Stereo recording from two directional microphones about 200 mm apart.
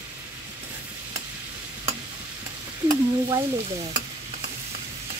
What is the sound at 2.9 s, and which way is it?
Stir, 20° right (ahead or behind).